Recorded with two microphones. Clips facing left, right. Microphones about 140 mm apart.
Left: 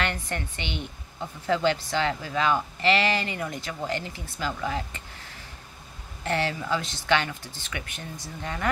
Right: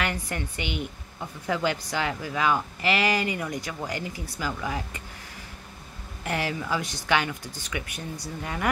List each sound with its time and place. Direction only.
0.0 s speech: 10° right (ahead or behind)
6.2 s speech: 10° right (ahead or behind)